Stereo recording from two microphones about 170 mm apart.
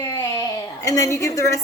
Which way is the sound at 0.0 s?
15° left (ahead or behind).